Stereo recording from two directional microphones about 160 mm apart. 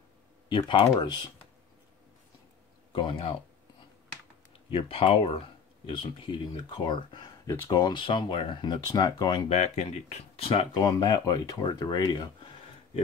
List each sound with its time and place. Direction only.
0.5 s speech: 30° left (ahead or behind)
2.9 s speech: 30° left (ahead or behind)
4.6 s speech: 35° left (ahead or behind)
9.5 s speech: 40° left (ahead or behind)
10.8 s speech: 25° left (ahead or behind)